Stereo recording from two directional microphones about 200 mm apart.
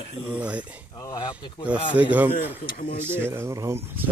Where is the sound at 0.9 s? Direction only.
20° left (ahead or behind).